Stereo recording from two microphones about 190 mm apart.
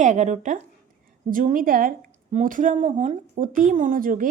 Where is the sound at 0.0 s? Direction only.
40° right (ahead or behind).